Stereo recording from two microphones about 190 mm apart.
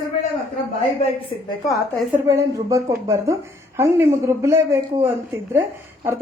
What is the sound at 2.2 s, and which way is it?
A woman's voice, 15° right (ahead or behind).